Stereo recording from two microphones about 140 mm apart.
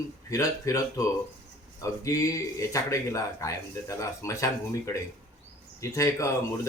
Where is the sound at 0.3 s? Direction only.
20° left (ahead or behind).